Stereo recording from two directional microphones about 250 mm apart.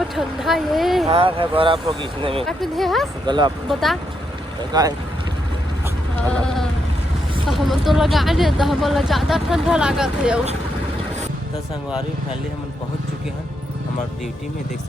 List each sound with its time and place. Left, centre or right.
0.2 s speech: centre
1.0 s speech: right
2.4 s speech: centre
3.2 s speech: centre
3.7 s speech: centre
4.7 s speech: centre
7.4 s speech: centre